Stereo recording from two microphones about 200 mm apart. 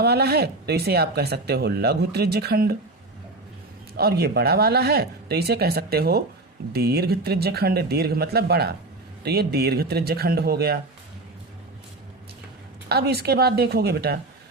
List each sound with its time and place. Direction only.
0.0 s speech: 55° right (ahead or behind)
3.9 s speech: 50° right (ahead or behind)
12.9 s speech: 55° right (ahead or behind)